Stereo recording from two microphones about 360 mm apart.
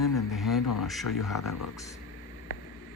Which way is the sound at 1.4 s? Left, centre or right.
Left.